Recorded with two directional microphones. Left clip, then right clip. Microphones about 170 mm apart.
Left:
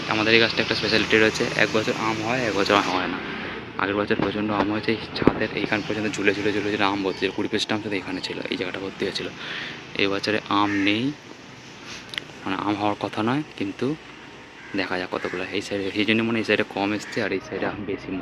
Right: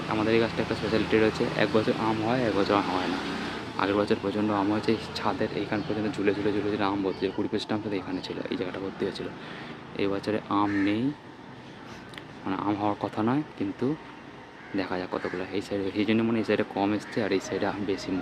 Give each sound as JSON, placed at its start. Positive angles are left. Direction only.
{"t": 0.1, "sound": "speech", "side_deg": 0}
{"t": 1.5, "sound": "speech", "side_deg": -15}
{"t": 12.1, "sound": "speech", "side_deg": 0}